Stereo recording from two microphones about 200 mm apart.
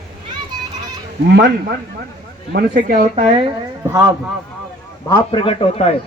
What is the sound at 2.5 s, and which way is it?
Speech, 50° right (ahead or behind).